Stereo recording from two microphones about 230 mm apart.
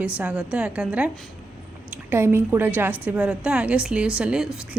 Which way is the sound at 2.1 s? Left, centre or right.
Centre.